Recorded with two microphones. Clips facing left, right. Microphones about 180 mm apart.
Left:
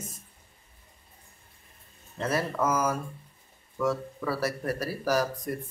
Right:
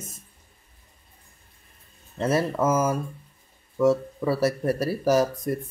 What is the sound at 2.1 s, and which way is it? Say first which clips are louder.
Speech: right 5 dB; 25° right (ahead or behind).